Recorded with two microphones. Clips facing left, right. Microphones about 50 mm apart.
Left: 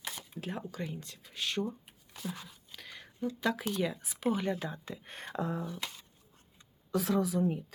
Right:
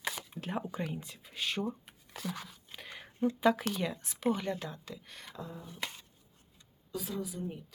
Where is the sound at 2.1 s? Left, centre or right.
Right.